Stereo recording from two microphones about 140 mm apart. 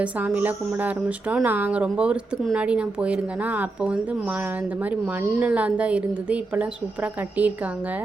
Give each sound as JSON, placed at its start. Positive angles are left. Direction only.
{"t": 0.0, "sound": "speech", "side_deg": -10}